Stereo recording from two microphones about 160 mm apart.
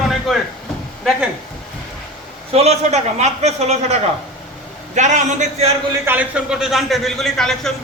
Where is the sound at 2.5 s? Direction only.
40° right (ahead or behind).